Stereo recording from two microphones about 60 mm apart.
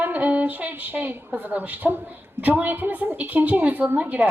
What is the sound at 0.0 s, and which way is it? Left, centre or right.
Speech, right.